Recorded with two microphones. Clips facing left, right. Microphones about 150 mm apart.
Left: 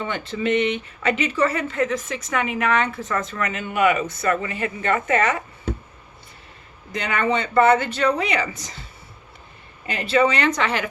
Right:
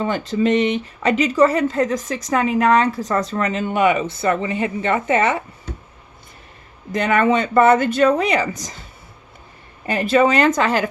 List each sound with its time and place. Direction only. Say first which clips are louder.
0.0 s speech: right 6 dB; 40° right (ahead or behind)
6.9 s speech: right 6 dB; 45° right (ahead or behind)
9.8 s speech: right 4 dB; 45° right (ahead or behind)